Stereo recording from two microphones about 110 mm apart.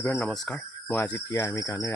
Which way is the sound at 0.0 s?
20° left (ahead or behind).